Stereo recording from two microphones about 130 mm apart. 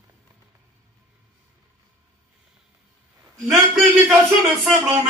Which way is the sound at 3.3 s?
Centre (ahead or behind).